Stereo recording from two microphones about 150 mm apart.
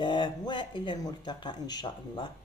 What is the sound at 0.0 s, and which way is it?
Speech, 30° left (ahead or behind).